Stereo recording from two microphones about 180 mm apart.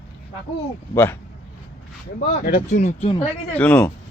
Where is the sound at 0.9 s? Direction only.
15° left (ahead or behind).